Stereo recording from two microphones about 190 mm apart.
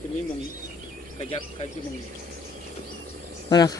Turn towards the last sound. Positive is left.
turn(degrees=20)  # may be behind; listen again after turning